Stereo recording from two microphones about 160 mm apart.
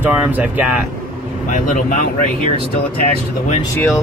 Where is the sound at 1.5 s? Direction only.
55° left (ahead or behind).